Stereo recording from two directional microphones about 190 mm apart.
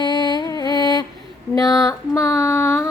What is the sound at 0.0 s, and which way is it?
Music, 25° left (ahead or behind).